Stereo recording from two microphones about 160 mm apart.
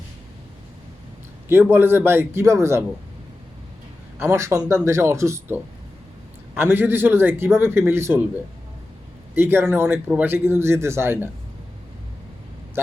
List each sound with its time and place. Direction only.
1.5 s a man's voice: 15° right (ahead or behind)
4.2 s a man's voice: 15° right (ahead or behind)
6.6 s a man's voice: 15° right (ahead or behind)
9.3 s a man's voice: 15° right (ahead or behind)